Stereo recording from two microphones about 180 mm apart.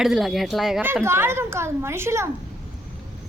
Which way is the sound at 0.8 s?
15° right (ahead or behind).